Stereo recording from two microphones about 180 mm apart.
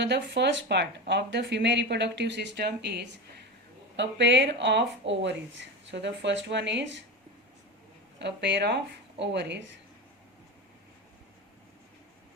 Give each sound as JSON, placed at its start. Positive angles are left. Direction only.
{"t": 0.0, "sound": "speech", "side_deg": -70}
{"t": 8.2, "sound": "speech", "side_deg": -75}